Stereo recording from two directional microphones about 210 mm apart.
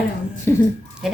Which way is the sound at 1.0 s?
Centre (ahead or behind).